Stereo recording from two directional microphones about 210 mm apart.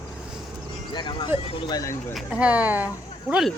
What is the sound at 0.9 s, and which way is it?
Speech, 20° left (ahead or behind).